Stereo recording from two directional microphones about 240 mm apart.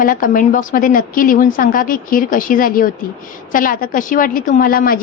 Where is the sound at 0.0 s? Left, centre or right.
Left.